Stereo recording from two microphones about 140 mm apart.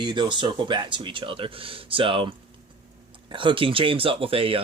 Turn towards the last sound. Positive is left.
turn(degrees=-40)  # may be behind; listen again after turning